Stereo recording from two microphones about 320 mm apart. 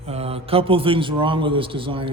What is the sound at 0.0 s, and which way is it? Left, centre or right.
A man's voice, centre.